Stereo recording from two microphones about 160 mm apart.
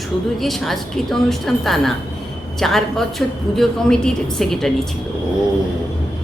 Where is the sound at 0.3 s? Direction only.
Centre (ahead or behind).